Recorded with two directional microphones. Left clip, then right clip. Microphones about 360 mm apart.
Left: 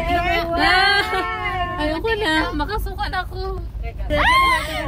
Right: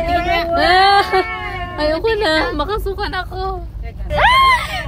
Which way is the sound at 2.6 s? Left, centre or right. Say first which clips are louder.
Right 4 dB; centre.